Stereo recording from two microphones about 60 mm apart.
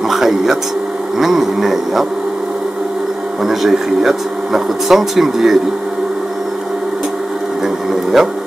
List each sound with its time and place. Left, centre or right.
0.1 s speech: centre
3.4 s speech: centre
7.6 s printer: centre